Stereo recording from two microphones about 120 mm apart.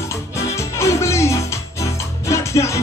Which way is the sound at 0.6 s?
25° left (ahead or behind).